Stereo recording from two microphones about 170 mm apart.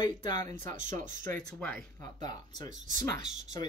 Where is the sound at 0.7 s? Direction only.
45° right (ahead or behind).